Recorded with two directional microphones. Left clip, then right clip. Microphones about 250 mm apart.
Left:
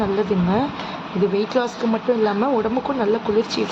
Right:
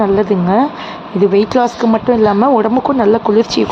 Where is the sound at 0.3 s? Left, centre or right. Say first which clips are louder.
Right 8 dB; right.